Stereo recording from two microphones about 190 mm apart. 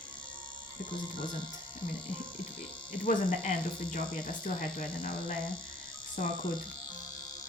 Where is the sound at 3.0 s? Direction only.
45° left (ahead or behind).